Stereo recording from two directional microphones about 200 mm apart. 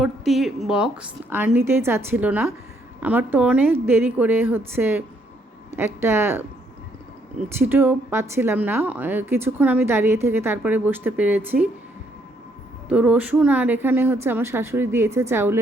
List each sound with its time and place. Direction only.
0.0 s a woman's voice: centre (ahead or behind)
7.6 s a woman's voice: 10° right (ahead or behind)
12.9 s a woman's voice: 5° right (ahead or behind)